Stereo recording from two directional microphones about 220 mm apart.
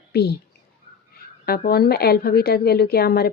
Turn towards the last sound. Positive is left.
turn(degrees=45)  # may be behind; listen again after turning